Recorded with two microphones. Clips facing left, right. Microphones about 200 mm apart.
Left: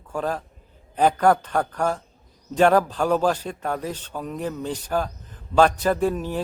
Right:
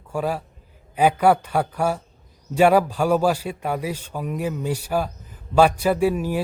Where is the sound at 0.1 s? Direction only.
10° right (ahead or behind).